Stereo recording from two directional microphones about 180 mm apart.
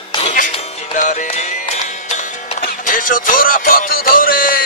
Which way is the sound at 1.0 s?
45° left (ahead or behind).